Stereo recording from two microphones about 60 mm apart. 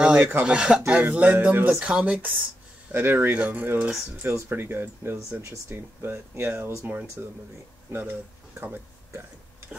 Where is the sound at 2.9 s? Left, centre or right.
Right.